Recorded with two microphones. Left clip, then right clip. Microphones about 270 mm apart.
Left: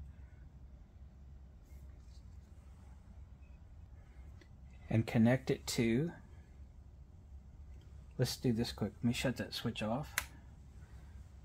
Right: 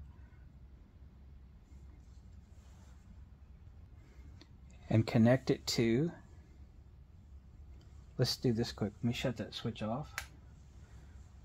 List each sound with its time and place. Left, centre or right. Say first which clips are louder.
4.8 s speech: right 3 dB; right
8.2 s speech: right 3 dB; right